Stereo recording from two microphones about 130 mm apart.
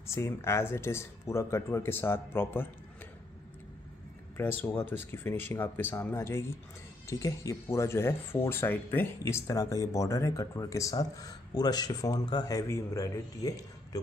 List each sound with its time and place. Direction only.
0.0 s speech: 20° left (ahead or behind)
4.4 s speech: 15° left (ahead or behind)